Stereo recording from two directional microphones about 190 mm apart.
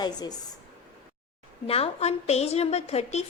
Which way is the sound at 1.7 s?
35° left (ahead or behind).